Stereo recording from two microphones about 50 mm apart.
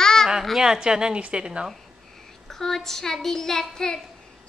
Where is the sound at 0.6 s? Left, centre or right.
Centre.